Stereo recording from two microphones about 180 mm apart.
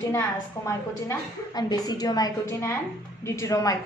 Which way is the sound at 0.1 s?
15° left (ahead or behind).